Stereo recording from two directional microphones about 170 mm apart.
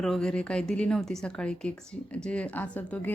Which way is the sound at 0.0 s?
5° left (ahead or behind).